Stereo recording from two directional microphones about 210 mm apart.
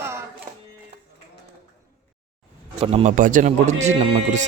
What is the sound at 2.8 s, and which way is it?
Speech, 30° right (ahead or behind).